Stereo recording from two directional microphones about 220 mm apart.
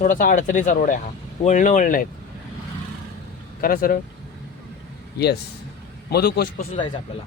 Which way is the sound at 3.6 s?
40° left (ahead or behind).